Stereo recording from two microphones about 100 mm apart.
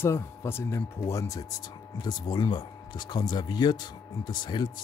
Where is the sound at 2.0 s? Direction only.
45° left (ahead or behind).